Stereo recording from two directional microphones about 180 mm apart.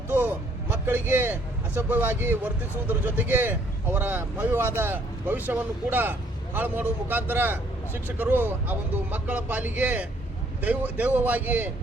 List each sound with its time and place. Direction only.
0.1 s a man's voice: 10° right (ahead or behind)